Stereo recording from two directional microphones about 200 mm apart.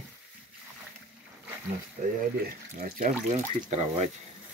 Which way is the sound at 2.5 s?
45° right (ahead or behind).